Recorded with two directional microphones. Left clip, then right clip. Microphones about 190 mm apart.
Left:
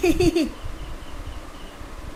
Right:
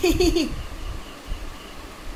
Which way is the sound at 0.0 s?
30° left (ahead or behind).